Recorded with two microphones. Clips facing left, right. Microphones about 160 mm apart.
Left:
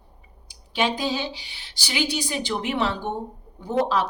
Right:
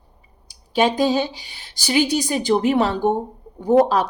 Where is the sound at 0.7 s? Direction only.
45° right (ahead or behind).